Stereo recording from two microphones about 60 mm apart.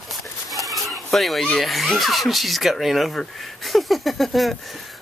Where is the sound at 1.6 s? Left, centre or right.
Centre.